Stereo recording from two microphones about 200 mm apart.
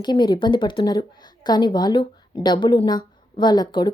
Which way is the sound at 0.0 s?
20° left (ahead or behind).